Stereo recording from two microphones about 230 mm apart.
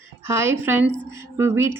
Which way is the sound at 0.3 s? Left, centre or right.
Centre.